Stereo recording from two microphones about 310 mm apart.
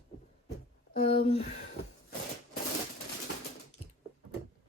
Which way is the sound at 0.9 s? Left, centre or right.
Left.